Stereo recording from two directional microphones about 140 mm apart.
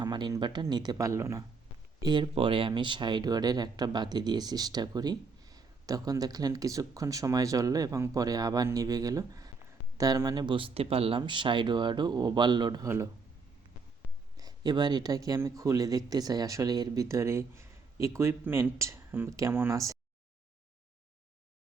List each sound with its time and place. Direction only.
0.0 s speech: 30° right (ahead or behind)
2.0 s speech: 35° right (ahead or behind)
14.3 s speech: 30° right (ahead or behind)